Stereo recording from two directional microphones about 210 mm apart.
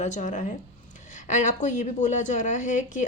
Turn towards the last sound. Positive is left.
turn(degrees=35)  # may be behind; listen again after turning